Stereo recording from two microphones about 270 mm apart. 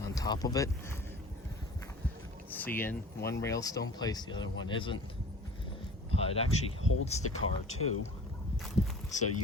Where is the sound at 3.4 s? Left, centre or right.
Centre.